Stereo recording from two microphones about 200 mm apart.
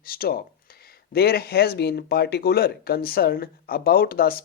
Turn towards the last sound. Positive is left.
turn(degrees=50)  # may be behind; listen again after turning